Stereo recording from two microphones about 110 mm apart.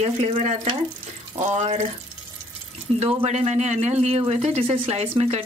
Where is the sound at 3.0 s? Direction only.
70° right (ahead or behind).